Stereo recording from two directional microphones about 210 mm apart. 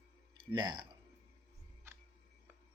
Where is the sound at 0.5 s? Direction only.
20° right (ahead or behind).